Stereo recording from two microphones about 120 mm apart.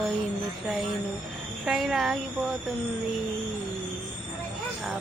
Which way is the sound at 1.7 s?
5° right (ahead or behind).